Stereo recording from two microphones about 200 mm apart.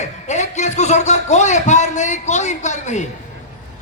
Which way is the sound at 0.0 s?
35° left (ahead or behind).